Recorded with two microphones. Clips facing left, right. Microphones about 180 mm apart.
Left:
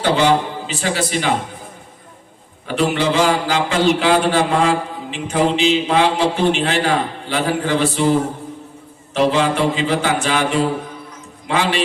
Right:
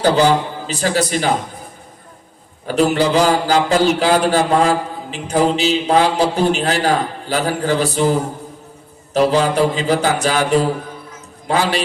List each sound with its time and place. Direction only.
0.0 s a man's voice: 40° right (ahead or behind)
2.6 s a man's voice: 40° right (ahead or behind)
9.3 s a man's voice: 40° right (ahead or behind)